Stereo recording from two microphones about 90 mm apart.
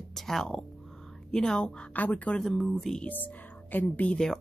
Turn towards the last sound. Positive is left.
turn(degrees=10)  # may be behind; listen again after turning